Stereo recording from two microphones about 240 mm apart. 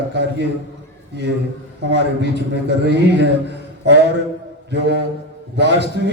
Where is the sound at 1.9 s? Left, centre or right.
Right.